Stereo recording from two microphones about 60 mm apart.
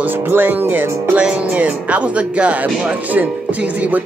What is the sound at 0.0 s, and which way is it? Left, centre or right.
Music, right.